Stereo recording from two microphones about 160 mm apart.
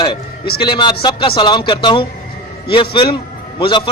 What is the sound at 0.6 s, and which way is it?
A man's voice, 30° left (ahead or behind).